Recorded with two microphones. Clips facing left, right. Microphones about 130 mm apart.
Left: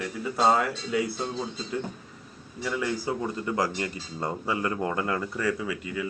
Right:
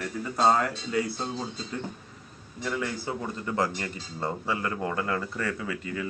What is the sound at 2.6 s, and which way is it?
Speech, 10° left (ahead or behind).